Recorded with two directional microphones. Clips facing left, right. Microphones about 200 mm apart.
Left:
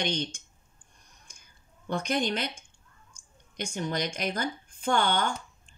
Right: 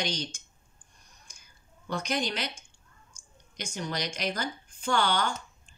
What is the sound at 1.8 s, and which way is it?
Speech, 50° left (ahead or behind).